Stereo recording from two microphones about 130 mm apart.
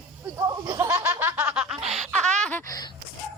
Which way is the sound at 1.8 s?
60° right (ahead or behind).